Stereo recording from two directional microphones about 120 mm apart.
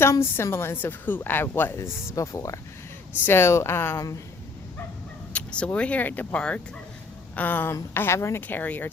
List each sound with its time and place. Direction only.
0.0 s a woman's voice: 20° left (ahead or behind)
5.3 s speech: 10° left (ahead or behind)